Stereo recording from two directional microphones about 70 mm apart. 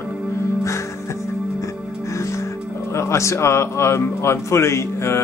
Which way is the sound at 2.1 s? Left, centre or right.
Left.